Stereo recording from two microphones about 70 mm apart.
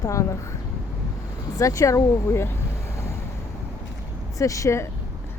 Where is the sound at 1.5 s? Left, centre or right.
Left.